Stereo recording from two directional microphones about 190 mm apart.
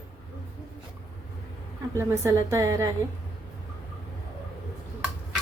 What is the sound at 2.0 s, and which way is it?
Speech, 15° right (ahead or behind).